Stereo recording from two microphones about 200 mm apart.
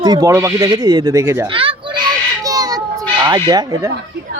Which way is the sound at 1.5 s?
25° right (ahead or behind).